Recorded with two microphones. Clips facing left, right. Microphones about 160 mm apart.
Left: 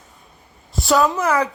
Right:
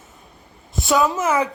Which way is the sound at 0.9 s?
5° right (ahead or behind).